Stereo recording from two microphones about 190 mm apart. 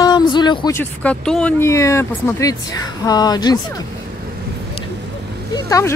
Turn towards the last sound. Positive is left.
turn(degrees=15)  # may be behind; listen again after turning